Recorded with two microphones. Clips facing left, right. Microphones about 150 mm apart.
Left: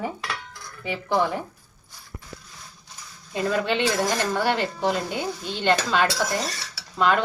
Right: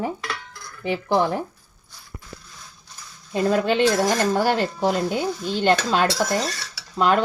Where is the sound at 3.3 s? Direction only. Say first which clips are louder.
Right 4 dB; 45° right (ahead or behind).